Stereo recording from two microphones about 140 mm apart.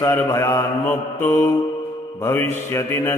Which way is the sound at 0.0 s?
20° left (ahead or behind).